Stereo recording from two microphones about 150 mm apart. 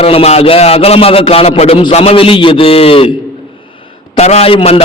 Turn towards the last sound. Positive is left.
turn(degrees=40)  # may be behind; listen again after turning